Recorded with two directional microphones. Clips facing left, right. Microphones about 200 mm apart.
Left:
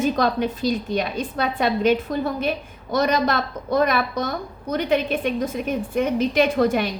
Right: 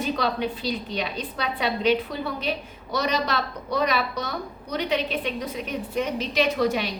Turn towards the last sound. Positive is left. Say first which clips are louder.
# left 4 dB
turn(degrees=50)  # may be behind; listen again after turning